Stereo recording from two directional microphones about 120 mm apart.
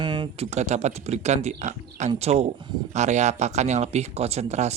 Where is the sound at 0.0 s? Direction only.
40° right (ahead or behind).